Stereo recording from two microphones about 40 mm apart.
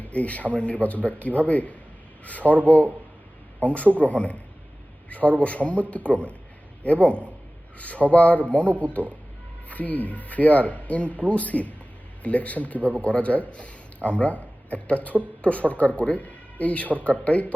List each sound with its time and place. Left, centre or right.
0.0 s speech: left